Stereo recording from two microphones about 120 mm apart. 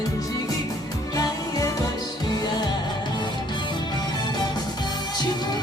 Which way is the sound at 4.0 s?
35° left (ahead or behind).